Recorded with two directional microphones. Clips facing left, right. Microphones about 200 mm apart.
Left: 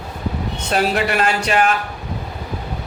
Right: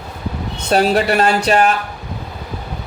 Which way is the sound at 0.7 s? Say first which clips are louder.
Right 5 dB; 35° right (ahead or behind).